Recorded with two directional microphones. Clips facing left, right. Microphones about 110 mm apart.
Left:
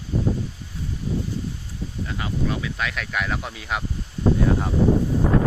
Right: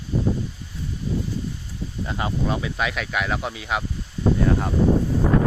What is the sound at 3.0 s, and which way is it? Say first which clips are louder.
Speech: right 2 dB; 5° right (ahead or behind).